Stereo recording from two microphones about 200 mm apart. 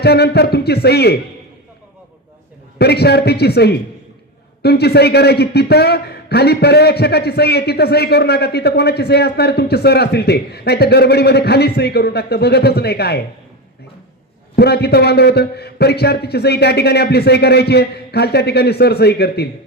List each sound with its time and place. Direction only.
0.0 s a man's voice: 55° left (ahead or behind)
2.7 s a man's voice: 55° left (ahead or behind)
14.5 s a man's voice: 55° left (ahead or behind)